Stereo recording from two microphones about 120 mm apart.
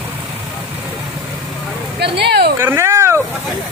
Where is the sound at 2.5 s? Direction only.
20° right (ahead or behind).